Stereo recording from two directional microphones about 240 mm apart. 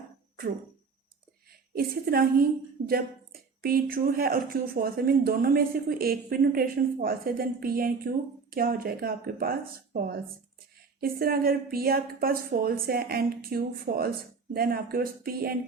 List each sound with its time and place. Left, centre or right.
1.7 s speech: right